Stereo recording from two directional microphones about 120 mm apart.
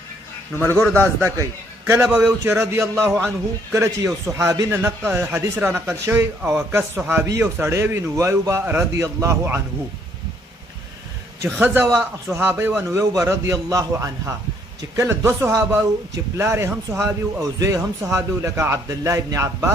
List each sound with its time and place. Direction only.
1.2 s a man's voice: 25° right (ahead or behind)
2.0 s a man's voice: 5° right (ahead or behind)
2.4 s a man's voice: 20° right (ahead or behind)
11.6 s a man's voice: 15° right (ahead or behind)